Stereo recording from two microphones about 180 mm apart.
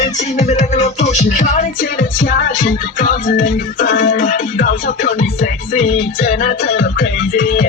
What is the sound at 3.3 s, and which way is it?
Music, 45° left (ahead or behind).